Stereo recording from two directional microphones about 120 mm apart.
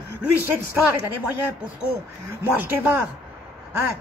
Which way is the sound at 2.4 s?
15° right (ahead or behind).